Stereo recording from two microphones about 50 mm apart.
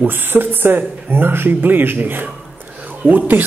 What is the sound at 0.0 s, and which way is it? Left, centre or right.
Speech, right.